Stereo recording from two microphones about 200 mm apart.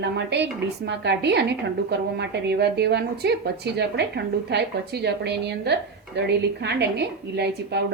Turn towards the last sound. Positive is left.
turn(degrees=-55)  # may be behind; listen again after turning